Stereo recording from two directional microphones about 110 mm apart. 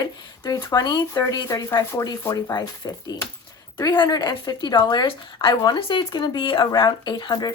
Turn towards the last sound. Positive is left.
turn(degrees=40)  # may be behind; listen again after turning